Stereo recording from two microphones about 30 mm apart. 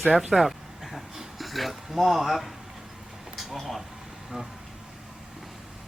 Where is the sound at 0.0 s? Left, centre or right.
Centre.